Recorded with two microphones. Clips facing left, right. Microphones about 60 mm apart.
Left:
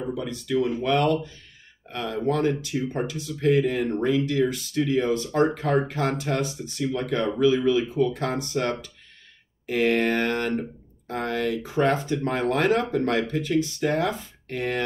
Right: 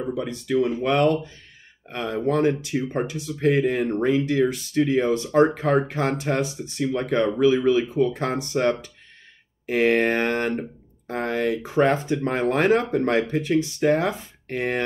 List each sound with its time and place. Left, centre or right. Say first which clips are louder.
0.2 s speech: right 3 dB; right